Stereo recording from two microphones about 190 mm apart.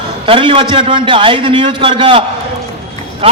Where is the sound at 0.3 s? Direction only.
25° right (ahead or behind).